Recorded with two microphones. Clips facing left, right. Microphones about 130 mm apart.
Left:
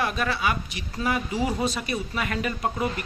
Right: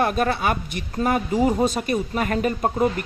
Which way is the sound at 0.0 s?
45° right (ahead or behind).